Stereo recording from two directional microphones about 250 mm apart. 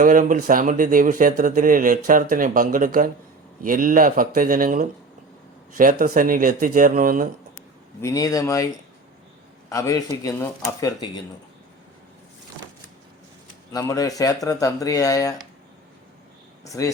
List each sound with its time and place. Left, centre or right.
0.0 s speech: right
8.0 s speech: centre
13.7 s speech: centre
16.6 s speech: centre